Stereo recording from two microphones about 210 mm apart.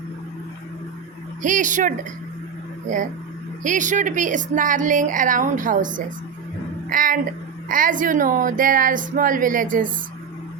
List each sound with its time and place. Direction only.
1.4 s a woman's voice: 40° right (ahead or behind)
3.6 s a woman's voice: 35° right (ahead or behind)